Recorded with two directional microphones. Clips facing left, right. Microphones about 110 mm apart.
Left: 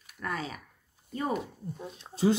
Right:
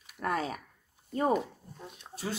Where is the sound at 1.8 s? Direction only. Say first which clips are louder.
Left 12 dB; 25° left (ahead or behind).